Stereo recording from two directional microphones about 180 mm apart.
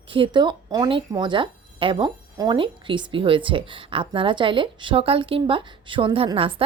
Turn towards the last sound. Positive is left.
turn(degrees=-30)  # may be behind; listen again after turning